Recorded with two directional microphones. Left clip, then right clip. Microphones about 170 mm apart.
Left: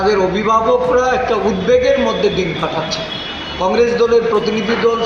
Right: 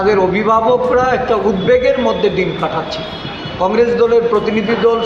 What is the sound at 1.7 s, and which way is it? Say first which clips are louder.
Speech: even; 30° right (ahead or behind).